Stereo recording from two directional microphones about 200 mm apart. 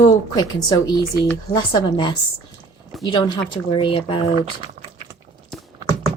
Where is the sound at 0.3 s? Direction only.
20° left (ahead or behind).